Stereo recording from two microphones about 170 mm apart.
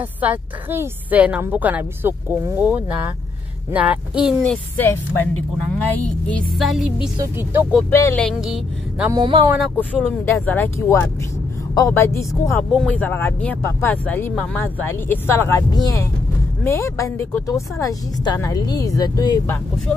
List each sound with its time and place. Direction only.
0.2 s a woman's voice: 10° right (ahead or behind)
4.4 s speech: 10° left (ahead or behind)
7.2 s a woman's voice: 10° right (ahead or behind)
7.9 s speech: 15° left (ahead or behind)
8.2 s speech: centre (ahead or behind)
9.1 s speech: 25° right (ahead or behind)
10.0 s a woman's voice: 15° left (ahead or behind)